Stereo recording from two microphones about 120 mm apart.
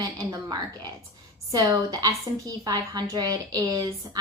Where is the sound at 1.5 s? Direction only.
30° right (ahead or behind).